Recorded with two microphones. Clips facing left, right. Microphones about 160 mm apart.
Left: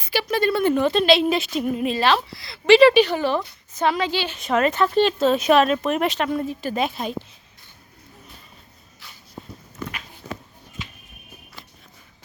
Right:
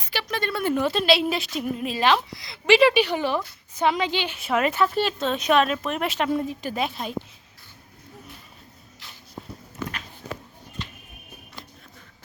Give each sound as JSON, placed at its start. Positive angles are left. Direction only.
{"t": 0.0, "sound": "a sound", "side_deg": 5}
{"t": 0.6, "sound": "a woman's voice", "side_deg": -5}
{"t": 2.0, "sound": "a woman's voice", "side_deg": -15}
{"t": 5.2, "sound": "a woman's voice", "side_deg": 5}
{"t": 6.1, "sound": "a woman's voice", "side_deg": -15}
{"t": 6.7, "sound": "a woman's voice", "side_deg": 0}